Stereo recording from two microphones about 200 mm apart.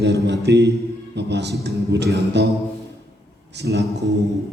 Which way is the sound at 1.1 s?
60° right (ahead or behind).